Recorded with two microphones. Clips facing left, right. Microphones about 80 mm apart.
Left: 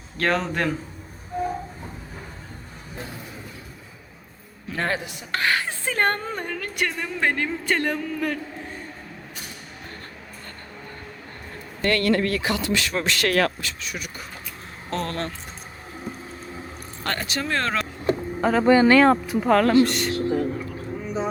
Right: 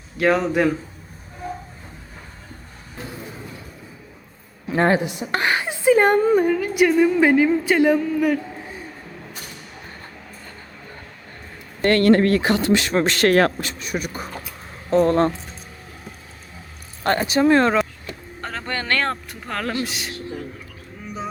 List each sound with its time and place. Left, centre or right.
0.2 s a woman's voice: centre
4.7 s a woman's voice: right; by 8.8 s centre
11.8 s speech: right
14.8 s speech: centre
17.0 s speech: right
18.3 s speech: centre